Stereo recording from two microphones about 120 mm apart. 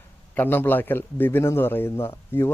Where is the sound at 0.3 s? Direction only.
15° left (ahead or behind).